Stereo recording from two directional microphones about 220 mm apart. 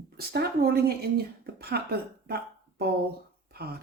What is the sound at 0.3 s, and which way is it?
Speech, 45° right (ahead or behind).